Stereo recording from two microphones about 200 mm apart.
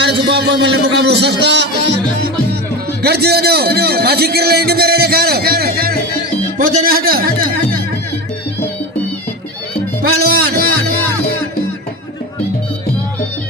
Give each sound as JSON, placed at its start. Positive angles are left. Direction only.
{"t": 0.0, "sound": "a man's voice", "side_deg": -55}
{"t": 3.0, "sound": "a man's voice", "side_deg": -55}
{"t": 10.0, "sound": "speech", "side_deg": -50}